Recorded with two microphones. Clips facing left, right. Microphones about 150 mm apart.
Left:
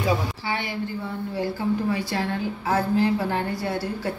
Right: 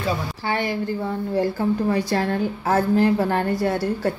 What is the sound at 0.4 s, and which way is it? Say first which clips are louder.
A woman's voice: right 4 dB; 45° right (ahead or behind).